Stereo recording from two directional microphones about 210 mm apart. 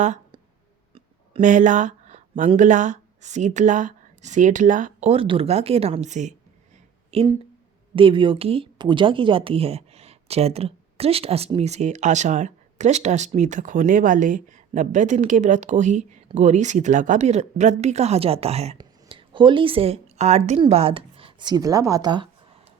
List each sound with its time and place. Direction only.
0.0 s speech: 35° right (ahead or behind)
0.9 s a sound: 30° right (ahead or behind)
2.5 s speech: 35° right (ahead or behind); by 22.3 s 20° right (ahead or behind)